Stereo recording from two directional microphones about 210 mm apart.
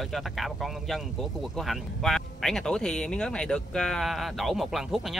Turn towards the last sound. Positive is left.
turn(degrees=0)  # may be behind; listen again after turning